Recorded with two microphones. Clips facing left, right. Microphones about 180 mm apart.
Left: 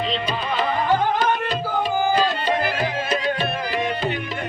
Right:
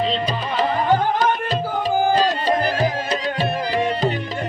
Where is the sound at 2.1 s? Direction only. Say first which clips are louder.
Right 2 dB; 40° right (ahead or behind).